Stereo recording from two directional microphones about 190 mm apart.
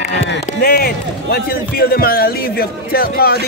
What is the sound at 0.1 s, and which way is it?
A man's voice, 70° left (ahead or behind).